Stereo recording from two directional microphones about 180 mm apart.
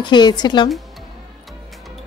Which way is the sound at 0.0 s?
25° left (ahead or behind).